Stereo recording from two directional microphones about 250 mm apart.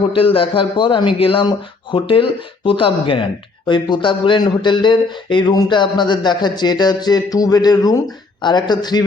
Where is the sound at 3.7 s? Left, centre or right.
Centre.